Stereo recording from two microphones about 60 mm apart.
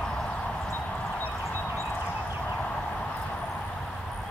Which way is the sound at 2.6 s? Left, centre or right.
Left.